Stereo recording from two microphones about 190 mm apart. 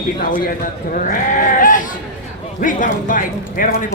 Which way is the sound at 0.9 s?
45° left (ahead or behind).